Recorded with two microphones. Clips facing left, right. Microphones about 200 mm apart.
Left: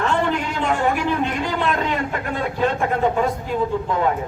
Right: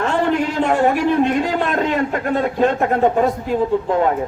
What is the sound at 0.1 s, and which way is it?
A man's voice, 40° right (ahead or behind).